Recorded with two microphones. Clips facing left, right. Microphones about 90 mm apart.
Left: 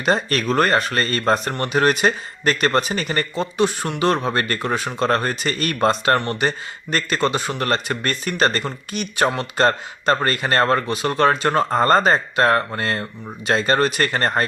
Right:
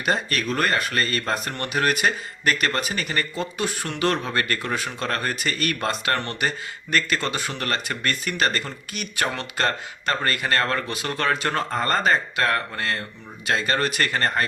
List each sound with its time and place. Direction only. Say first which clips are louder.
0.0 s speech: left 4 dB; 35° left (ahead or behind)